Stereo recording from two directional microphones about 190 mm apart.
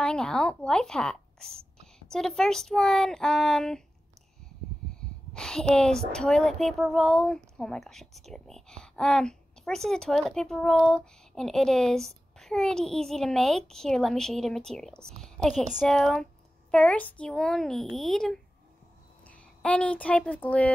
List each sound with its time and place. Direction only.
0.0 s speech: 5° left (ahead or behind)
5.3 s speech: 5° left (ahead or behind)